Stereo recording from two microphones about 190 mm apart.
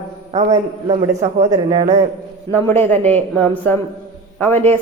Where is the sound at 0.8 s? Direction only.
35° right (ahead or behind).